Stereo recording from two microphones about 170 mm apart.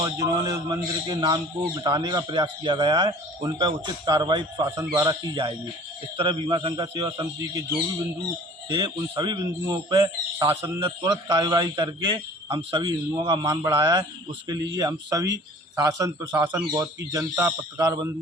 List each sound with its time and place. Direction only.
0.0 s a man's voice: 20° right (ahead or behind)
8.7 s a man's voice: 25° right (ahead or behind)